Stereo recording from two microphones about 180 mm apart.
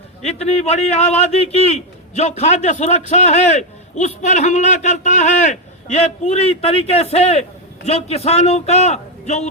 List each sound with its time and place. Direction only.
0.2 s a man's voice: 35° left (ahead or behind)